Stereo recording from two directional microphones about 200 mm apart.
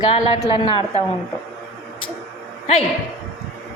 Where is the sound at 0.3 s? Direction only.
30° left (ahead or behind).